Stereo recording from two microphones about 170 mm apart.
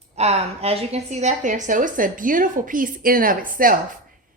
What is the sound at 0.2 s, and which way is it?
A woman's voice, 35° right (ahead or behind).